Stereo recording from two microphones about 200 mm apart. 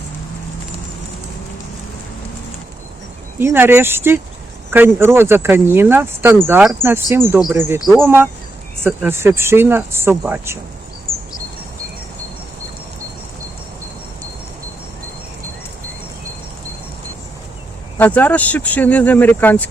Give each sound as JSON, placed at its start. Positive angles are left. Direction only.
{"t": 3.3, "sound": "speech", "side_deg": -10}
{"t": 17.9, "sound": "speech", "side_deg": 10}